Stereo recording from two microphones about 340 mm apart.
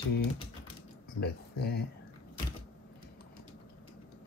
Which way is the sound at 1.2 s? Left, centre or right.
Left.